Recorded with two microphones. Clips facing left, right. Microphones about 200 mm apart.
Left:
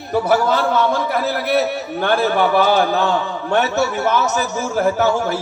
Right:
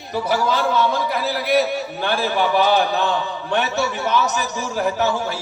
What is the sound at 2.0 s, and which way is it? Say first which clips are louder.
A man's voice: left 5 dB; 50° left (ahead or behind).